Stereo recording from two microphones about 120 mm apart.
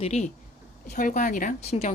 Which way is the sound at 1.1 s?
90° left.